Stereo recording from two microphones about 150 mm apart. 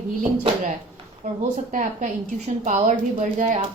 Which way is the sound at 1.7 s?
55° right (ahead or behind).